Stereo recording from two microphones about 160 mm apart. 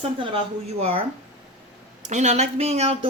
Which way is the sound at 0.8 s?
35° right (ahead or behind).